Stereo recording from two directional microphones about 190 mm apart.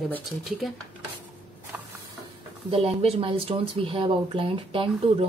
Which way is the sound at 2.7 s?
30° right (ahead or behind).